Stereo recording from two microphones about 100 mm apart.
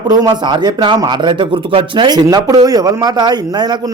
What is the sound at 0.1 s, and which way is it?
A man's voice, 40° right (ahead or behind).